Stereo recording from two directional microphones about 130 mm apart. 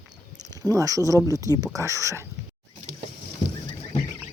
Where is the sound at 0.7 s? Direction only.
25° right (ahead or behind).